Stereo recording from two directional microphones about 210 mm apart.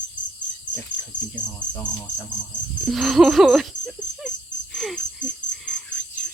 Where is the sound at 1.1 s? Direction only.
60° left (ahead or behind).